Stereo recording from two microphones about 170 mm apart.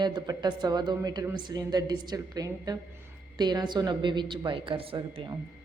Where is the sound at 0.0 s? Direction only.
25° right (ahead or behind).